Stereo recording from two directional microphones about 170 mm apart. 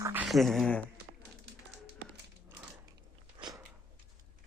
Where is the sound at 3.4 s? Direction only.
25° right (ahead or behind).